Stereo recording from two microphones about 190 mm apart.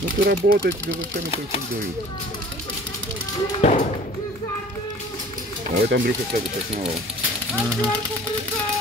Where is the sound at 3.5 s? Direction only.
35° left (ahead or behind).